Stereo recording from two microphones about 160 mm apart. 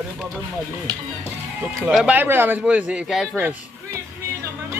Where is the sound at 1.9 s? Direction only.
10° right (ahead or behind).